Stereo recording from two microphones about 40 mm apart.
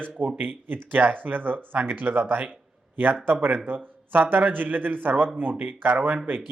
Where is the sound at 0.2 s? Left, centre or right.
Right.